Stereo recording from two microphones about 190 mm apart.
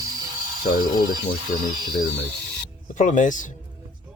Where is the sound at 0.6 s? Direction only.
50° left (ahead or behind).